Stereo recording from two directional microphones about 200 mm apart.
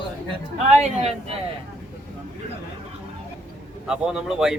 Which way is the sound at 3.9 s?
5° right (ahead or behind).